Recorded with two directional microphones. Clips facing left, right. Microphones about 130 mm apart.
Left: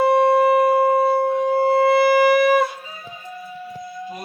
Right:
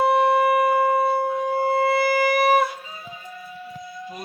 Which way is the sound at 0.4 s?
30° left (ahead or behind).